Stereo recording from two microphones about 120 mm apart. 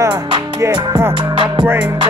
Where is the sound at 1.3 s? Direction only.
40° right (ahead or behind).